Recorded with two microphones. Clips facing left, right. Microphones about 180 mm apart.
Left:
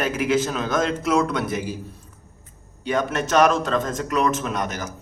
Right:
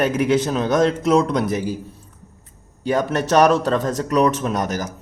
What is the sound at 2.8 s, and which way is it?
Speech, 40° right (ahead or behind).